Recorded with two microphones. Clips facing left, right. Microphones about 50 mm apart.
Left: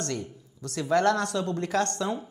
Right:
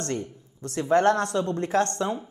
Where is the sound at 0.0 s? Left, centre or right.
Right.